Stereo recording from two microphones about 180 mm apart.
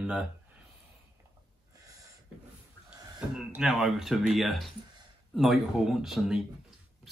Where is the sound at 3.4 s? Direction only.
5° right (ahead or behind).